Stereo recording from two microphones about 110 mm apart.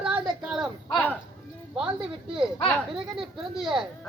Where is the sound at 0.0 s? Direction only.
5° right (ahead or behind).